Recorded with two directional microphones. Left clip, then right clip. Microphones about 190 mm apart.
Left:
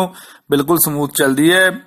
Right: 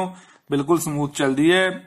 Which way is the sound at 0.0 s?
40° left (ahead or behind).